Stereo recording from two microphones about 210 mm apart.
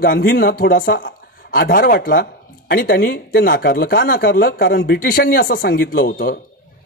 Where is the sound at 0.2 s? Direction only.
45° left (ahead or behind).